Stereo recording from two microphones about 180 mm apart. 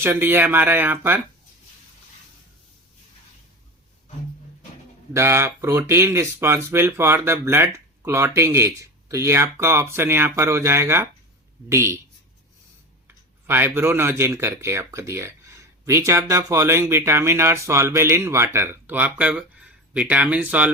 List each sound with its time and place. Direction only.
0.0 s speech: 10° right (ahead or behind)
5.1 s speech: 15° right (ahead or behind)
13.1 s speech: 10° right (ahead or behind)